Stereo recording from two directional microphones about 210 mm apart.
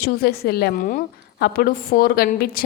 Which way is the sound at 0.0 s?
50° left (ahead or behind).